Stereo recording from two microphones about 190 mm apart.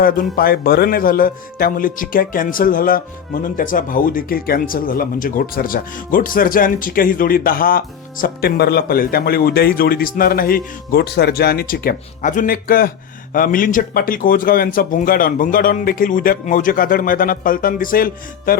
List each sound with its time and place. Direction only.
0.0 s speech: 50° left (ahead or behind)